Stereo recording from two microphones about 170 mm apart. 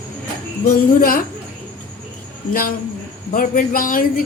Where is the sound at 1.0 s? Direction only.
60° left (ahead or behind).